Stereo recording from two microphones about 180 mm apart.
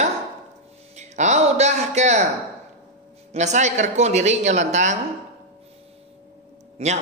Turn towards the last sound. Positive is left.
turn(degrees=-40)  # may be behind; listen again after turning